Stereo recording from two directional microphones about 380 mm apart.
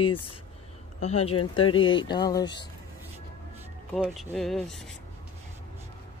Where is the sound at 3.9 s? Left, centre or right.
Centre.